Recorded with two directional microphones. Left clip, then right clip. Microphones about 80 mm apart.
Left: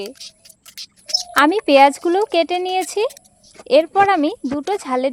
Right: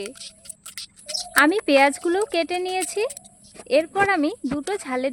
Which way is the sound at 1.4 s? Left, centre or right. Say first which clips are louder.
Left 5 dB; left.